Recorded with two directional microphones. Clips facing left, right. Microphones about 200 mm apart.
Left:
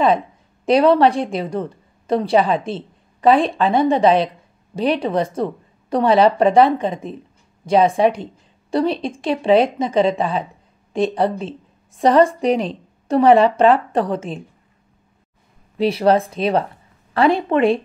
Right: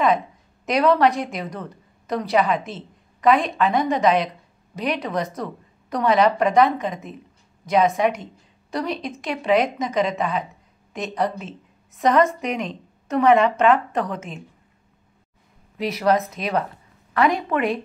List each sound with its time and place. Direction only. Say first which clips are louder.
0.7 s a woman's voice: left 5 dB; 30° left (ahead or behind)
15.8 s a woman's voice: left 5 dB; 30° left (ahead or behind)